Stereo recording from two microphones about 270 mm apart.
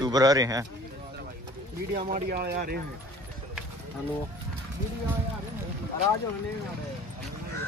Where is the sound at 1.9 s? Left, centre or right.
Right.